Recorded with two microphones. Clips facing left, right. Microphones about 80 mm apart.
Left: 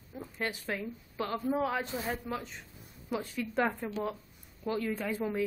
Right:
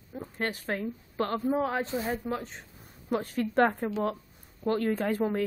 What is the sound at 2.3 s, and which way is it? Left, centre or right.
Speech, right.